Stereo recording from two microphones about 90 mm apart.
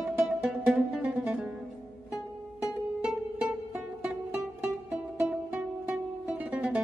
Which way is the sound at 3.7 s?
10° right (ahead or behind).